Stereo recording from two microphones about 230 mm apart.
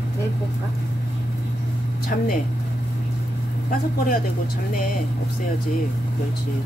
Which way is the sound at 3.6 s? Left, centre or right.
Left.